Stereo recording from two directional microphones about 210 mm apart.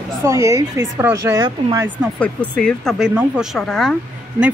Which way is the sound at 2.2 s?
5° left (ahead or behind).